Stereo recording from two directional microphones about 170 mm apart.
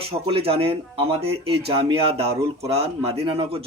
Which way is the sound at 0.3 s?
35° right (ahead or behind).